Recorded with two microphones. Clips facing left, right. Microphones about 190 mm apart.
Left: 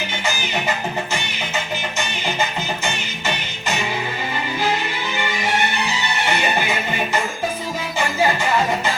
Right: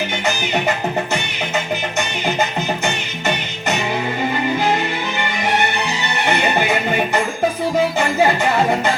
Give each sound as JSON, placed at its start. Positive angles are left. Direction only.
{"t": 2.8, "sound": "music", "side_deg": -60}
{"t": 6.2, "sound": "music", "side_deg": -55}